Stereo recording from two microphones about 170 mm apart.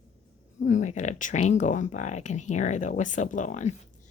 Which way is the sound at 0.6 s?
45° left (ahead or behind).